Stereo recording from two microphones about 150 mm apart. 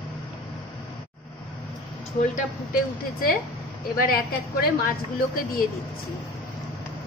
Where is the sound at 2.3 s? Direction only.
70° left (ahead or behind).